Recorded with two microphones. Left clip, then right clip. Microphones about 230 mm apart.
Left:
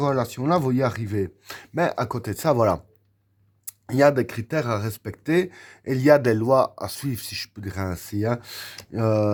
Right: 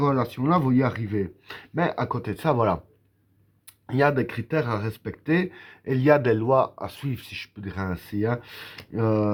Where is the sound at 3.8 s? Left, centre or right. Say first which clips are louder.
Left 4 dB; left.